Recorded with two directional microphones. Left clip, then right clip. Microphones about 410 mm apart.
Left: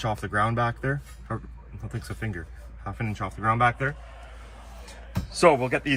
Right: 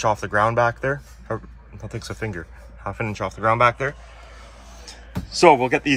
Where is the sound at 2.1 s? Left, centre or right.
Right.